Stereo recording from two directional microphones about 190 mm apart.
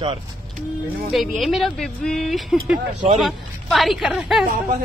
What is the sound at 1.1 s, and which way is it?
Speech, centre (ahead or behind).